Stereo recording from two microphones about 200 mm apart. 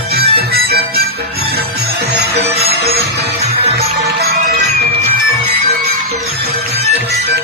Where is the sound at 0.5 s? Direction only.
50° right (ahead or behind).